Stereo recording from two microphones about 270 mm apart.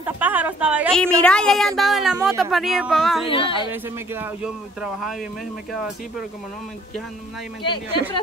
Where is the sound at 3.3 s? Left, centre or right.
Centre.